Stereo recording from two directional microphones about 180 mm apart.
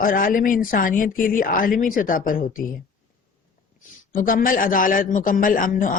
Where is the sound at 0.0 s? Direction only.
50° left (ahead or behind).